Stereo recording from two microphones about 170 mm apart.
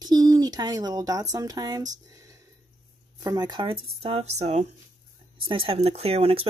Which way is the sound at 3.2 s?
25° right (ahead or behind).